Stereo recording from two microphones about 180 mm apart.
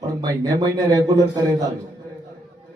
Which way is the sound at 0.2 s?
20° right (ahead or behind).